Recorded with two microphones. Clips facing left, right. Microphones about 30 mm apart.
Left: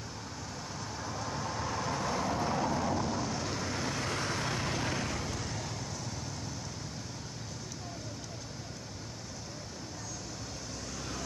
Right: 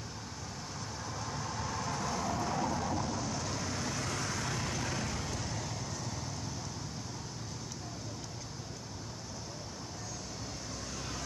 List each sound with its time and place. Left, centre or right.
1.1 s vehicle: centre
5.2 s vehicle: centre